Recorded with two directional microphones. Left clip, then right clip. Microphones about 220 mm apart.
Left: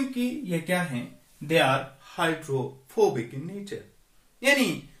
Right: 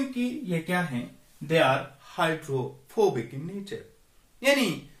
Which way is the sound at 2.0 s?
15° right (ahead or behind).